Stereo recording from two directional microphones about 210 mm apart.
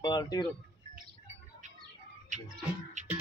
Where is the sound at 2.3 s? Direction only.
35° right (ahead or behind).